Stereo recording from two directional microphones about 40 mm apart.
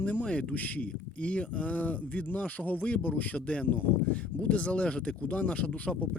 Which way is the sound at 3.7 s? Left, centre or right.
Left.